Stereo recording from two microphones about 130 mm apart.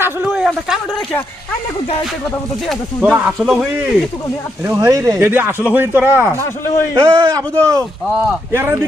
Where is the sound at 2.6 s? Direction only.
Centre (ahead or behind).